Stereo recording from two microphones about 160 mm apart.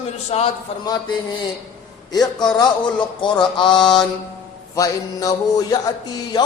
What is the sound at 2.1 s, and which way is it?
Music, 25° left (ahead or behind).